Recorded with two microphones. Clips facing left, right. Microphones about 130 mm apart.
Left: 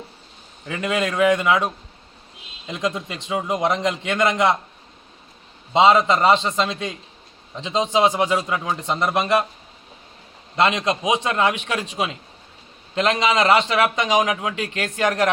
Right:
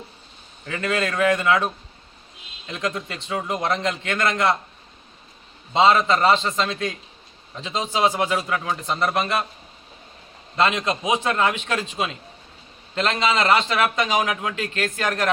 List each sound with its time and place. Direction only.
0.6 s a man's voice: 15° left (ahead or behind)
5.7 s a man's voice: 15° left (ahead or behind)
10.6 s a man's voice: 15° left (ahead or behind)